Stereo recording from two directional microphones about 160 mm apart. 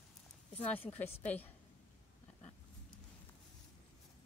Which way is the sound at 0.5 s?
10° left (ahead or behind).